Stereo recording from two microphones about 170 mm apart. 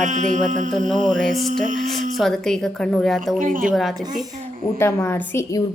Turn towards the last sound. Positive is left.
turn(degrees=15)  # may be behind; listen again after turning